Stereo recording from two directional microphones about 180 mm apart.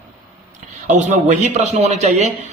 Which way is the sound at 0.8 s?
40° right (ahead or behind).